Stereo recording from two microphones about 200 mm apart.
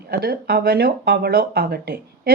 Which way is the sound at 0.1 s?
50° right (ahead or behind).